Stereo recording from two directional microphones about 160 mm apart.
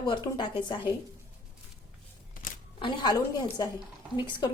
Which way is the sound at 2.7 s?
30° left (ahead or behind).